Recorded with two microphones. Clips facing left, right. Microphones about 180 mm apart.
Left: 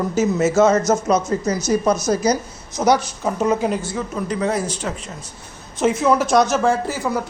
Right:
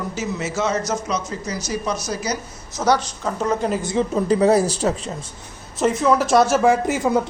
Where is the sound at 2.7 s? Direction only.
15° left (ahead or behind).